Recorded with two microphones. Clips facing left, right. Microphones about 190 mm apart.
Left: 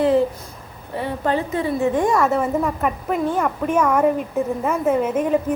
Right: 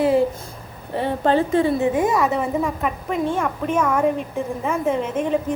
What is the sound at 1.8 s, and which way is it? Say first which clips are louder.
A woman's voice: left 1 dB; 5° right (ahead or behind).